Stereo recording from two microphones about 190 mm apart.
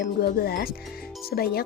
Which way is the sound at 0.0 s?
55° left (ahead or behind).